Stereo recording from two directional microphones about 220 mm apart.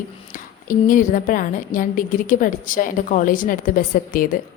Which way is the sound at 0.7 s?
40° left (ahead or behind).